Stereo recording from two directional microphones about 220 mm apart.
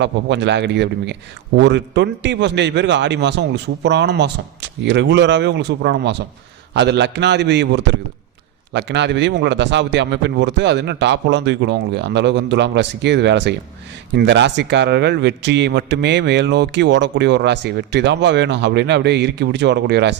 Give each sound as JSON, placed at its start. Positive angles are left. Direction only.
{"t": 0.0, "sound": "a man's voice", "side_deg": -55}